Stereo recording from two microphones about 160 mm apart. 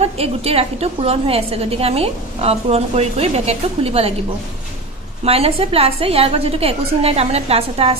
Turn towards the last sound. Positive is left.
turn(degrees=-40)  # may be behind; listen again after turning